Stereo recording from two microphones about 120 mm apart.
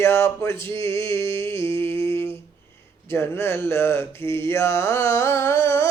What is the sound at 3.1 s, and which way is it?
A man's voice, 20° left (ahead or behind).